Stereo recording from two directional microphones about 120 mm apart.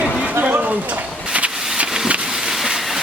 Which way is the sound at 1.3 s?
10° right (ahead or behind).